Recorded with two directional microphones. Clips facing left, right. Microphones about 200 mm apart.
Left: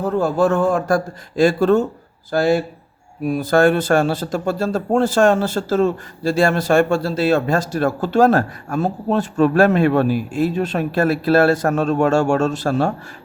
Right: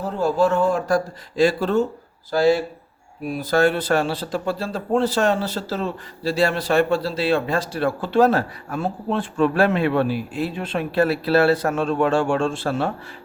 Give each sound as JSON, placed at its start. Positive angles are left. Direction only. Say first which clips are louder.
{"t": 0.0, "sound": "a man's voice", "louder": "left 3 dB", "side_deg": 50}